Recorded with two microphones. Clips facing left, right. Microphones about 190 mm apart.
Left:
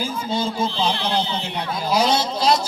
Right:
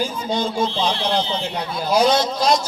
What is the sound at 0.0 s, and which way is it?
Speech, 5° left (ahead or behind).